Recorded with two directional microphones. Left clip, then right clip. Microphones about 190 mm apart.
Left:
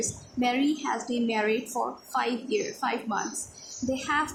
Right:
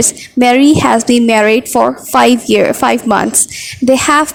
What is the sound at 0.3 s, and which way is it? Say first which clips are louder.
A woman's voice: right 19 dB; 50° right (ahead or behind).